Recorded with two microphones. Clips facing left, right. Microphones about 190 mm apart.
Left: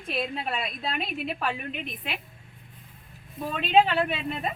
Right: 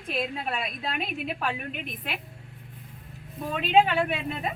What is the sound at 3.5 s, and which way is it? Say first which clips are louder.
Speech: even; 10° right (ahead or behind).